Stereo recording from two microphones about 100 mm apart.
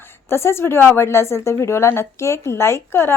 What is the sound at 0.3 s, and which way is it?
A woman's voice, 25° left (ahead or behind).